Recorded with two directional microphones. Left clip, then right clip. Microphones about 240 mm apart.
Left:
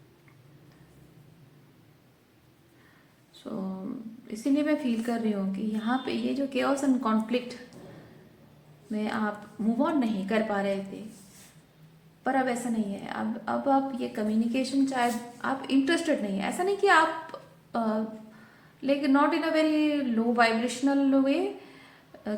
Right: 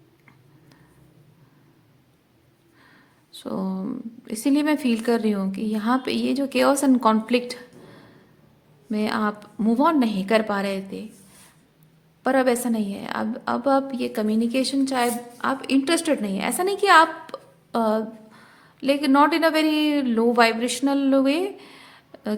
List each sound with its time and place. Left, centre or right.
3.3 s a woman's voice: right
8.9 s a woman's voice: right
12.2 s a woman's voice: right